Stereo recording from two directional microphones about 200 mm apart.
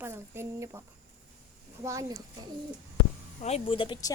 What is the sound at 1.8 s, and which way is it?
Speech, 15° right (ahead or behind).